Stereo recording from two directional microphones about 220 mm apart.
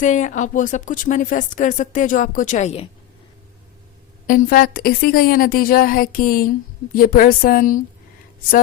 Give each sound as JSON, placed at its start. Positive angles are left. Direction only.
{"t": 0.0, "sound": "speech", "side_deg": 35}
{"t": 4.3, "sound": "speech", "side_deg": 40}